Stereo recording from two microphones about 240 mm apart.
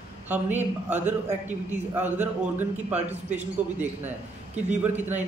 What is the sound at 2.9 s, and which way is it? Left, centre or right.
Speech, right.